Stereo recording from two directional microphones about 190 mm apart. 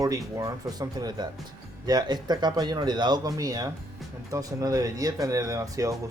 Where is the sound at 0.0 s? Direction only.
20° right (ahead or behind).